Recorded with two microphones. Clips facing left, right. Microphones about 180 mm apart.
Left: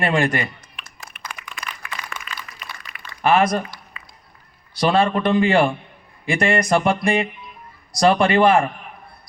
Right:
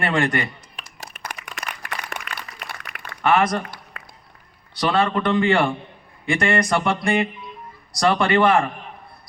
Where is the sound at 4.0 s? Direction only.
75° right (ahead or behind).